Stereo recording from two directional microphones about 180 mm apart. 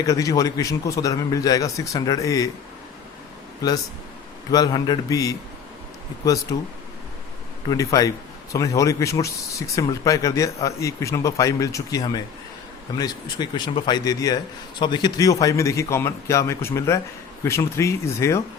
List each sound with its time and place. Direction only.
0.0 s a man's voice: 20° left (ahead or behind)
4.5 s a man's voice: 20° left (ahead or behind)
7.7 s a man's voice: 20° left (ahead or behind)